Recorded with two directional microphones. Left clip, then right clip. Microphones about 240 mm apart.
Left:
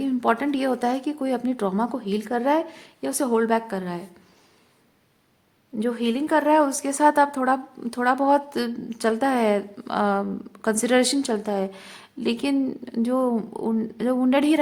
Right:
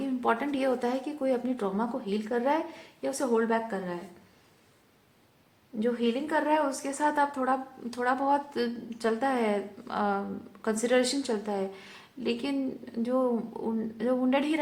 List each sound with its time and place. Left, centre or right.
0.0 s a woman's voice: left
5.8 s a woman's voice: left